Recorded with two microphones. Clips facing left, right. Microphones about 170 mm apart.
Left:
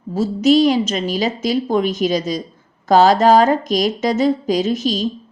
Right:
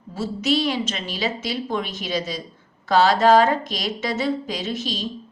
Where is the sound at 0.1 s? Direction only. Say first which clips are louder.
Left 9 dB; 40° left (ahead or behind).